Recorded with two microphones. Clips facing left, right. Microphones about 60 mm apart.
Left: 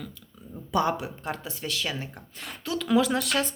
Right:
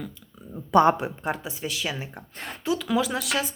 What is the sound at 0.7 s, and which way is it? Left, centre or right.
Speech, right.